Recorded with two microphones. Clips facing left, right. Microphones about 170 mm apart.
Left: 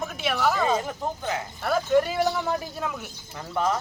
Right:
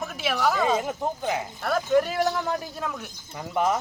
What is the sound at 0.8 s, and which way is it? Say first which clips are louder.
Speech: right 2 dB; 15° right (ahead or behind).